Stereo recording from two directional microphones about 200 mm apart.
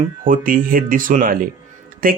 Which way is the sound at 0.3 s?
45° right (ahead or behind).